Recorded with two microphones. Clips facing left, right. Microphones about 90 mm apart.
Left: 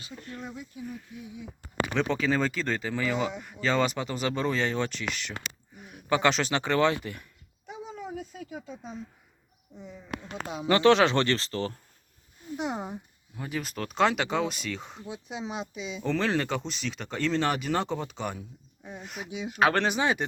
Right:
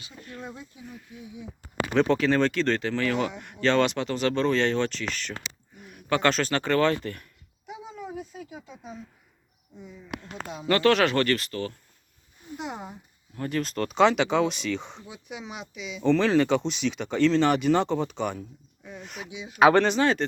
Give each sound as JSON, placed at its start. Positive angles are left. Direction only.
{"t": 0.3, "sound": "speech", "side_deg": -25}
{"t": 1.9, "sound": "speech", "side_deg": 0}
{"t": 8.4, "sound": "speech", "side_deg": -5}
{"t": 10.7, "sound": "speech", "side_deg": 20}
{"t": 13.3, "sound": "speech", "side_deg": 10}
{"t": 15.0, "sound": "speech", "side_deg": 30}
{"t": 16.0, "sound": "speech", "side_deg": 5}
{"t": 19.3, "sound": "speech", "side_deg": 50}
{"t": 19.5, "sound": "speech", "side_deg": -10}
{"t": 19.8, "sound": "speech", "side_deg": 10}